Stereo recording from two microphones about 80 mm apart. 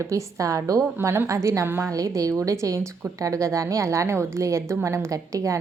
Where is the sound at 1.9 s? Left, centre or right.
Right.